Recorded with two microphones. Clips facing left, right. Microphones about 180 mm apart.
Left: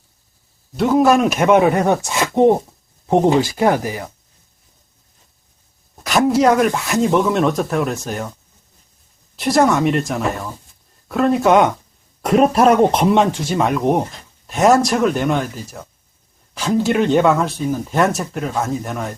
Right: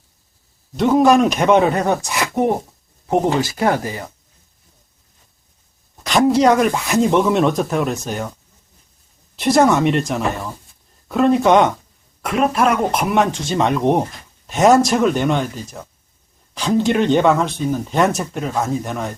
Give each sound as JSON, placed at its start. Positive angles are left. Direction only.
{"t": 0.8, "sound": "speech", "side_deg": 0}
{"t": 6.0, "sound": "speech", "side_deg": 5}
{"t": 9.3, "sound": "speech", "side_deg": 0}
{"t": 12.2, "sound": "speech", "side_deg": 35}
{"t": 13.5, "sound": "speech", "side_deg": 5}